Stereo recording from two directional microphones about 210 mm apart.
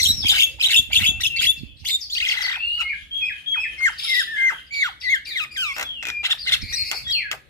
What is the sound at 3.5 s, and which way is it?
Squawk, 15° left (ahead or behind).